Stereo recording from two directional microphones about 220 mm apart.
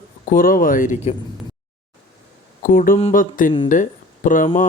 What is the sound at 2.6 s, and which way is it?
Speech, 40° left (ahead or behind).